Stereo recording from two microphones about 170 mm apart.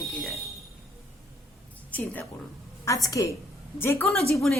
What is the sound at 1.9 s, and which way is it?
A woman's voice, 10° left (ahead or behind).